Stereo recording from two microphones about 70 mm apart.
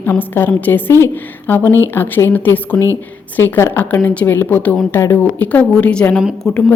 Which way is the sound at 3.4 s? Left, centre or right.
Left.